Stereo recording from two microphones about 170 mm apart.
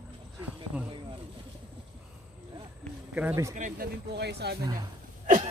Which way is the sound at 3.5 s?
50° right (ahead or behind).